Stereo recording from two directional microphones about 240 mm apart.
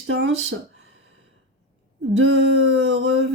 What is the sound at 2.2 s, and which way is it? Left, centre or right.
Speech, right.